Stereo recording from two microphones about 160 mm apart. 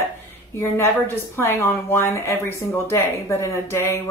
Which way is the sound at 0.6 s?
15° left (ahead or behind).